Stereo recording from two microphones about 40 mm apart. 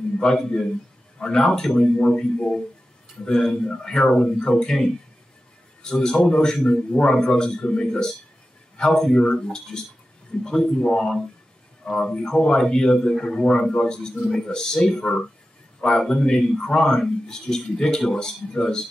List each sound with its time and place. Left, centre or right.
0.2 s a man's voice: centre